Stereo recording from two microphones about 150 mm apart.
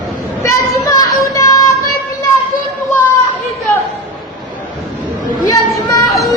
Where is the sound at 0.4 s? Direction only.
20° left (ahead or behind).